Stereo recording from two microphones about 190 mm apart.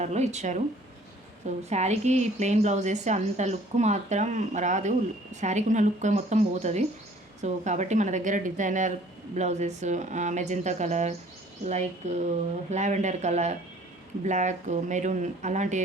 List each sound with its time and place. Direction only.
0.0 s a woman's voice: 35° right (ahead or behind)